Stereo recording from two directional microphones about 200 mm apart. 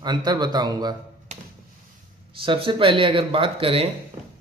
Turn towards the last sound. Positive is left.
turn(degrees=-25)  # may be behind; listen again after turning